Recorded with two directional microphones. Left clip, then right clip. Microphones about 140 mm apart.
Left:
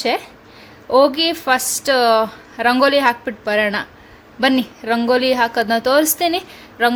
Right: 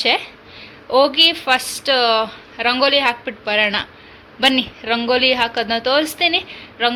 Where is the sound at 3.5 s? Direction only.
50° left (ahead or behind).